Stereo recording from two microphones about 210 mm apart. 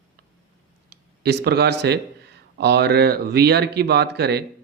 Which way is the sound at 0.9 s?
50° right (ahead or behind).